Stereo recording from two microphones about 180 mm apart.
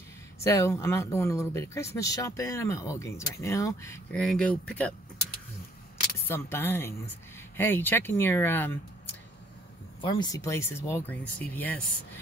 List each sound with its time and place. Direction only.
0.4 s speech: 15° left (ahead or behind)
4.1 s speech: 5° left (ahead or behind)
6.2 s speech: 10° left (ahead or behind)
10.0 s speech: 25° left (ahead or behind)